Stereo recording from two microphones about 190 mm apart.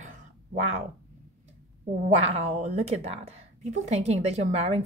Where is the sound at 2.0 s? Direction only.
35° right (ahead or behind).